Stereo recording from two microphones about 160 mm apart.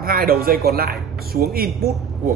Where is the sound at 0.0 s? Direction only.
70° right (ahead or behind).